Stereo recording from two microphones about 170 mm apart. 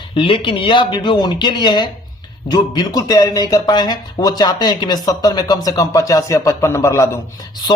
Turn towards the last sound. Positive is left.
turn(degrees=15)  # may be behind; listen again after turning